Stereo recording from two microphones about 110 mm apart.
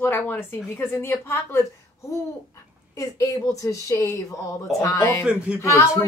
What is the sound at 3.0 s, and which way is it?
A woman's voice, 30° left (ahead or behind).